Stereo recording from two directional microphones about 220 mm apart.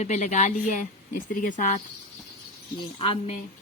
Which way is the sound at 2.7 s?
25° left (ahead or behind).